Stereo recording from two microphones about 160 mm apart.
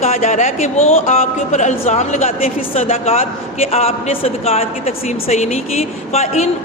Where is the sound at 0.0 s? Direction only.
45° left (ahead or behind).